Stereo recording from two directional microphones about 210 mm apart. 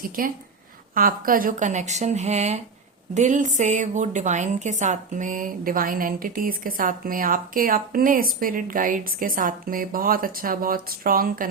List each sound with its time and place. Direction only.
0.2 s a woman's voice: 40° right (ahead or behind)